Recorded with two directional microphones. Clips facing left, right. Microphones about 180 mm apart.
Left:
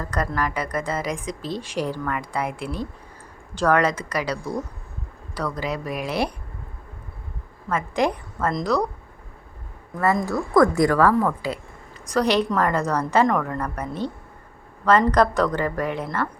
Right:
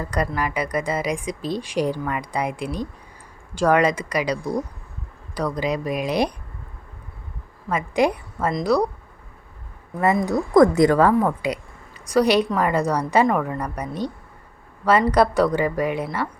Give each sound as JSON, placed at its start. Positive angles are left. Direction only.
{"t": 0.0, "sound": "speech", "side_deg": -10}
{"t": 7.7, "sound": "speech", "side_deg": -10}
{"t": 10.2, "sound": "a woman's voice", "side_deg": -20}